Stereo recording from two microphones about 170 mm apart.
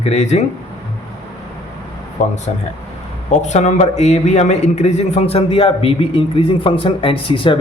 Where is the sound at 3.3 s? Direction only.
45° left (ahead or behind).